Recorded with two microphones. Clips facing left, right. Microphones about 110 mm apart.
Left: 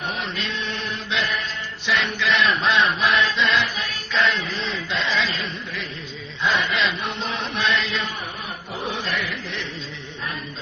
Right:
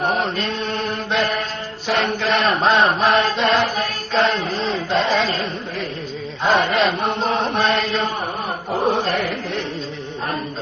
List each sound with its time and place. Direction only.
0.0 s mantra: 45° right (ahead or behind)
1.9 s chant: 45° right (ahead or behind)